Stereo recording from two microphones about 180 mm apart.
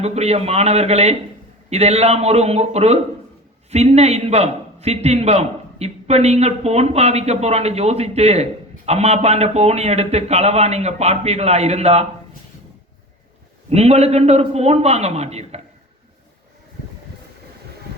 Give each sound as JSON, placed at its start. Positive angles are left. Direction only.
{"t": 0.0, "sound": "a man's voice", "side_deg": -35}
{"t": 13.7, "sound": "a man's voice", "side_deg": -35}